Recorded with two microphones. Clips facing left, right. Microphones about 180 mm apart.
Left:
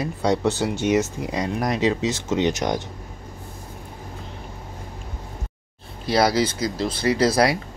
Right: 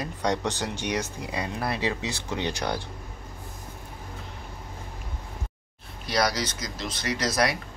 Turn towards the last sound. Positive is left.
turn(degrees=30)  # may be behind; listen again after turning